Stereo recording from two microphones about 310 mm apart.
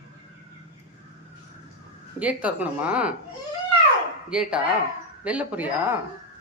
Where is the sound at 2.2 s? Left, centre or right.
Centre.